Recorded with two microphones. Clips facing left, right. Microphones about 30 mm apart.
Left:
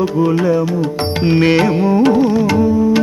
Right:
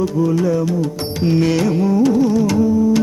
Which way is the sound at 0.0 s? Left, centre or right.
Left.